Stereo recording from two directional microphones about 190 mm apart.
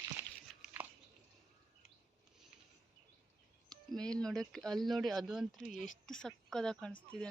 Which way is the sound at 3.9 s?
5° left (ahead or behind).